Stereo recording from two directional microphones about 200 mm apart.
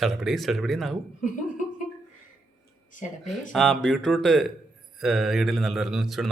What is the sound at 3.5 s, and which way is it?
Speech, 5° left (ahead or behind).